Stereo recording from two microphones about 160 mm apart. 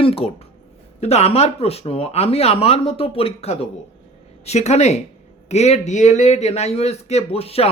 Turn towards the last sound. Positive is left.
turn(degrees=40)  # may be behind; listen again after turning